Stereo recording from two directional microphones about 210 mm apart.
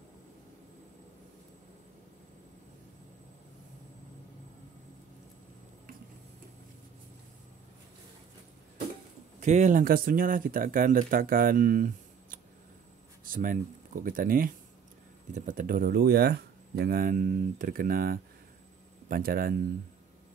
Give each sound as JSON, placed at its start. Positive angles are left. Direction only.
{"t": 9.4, "sound": "speech", "side_deg": -35}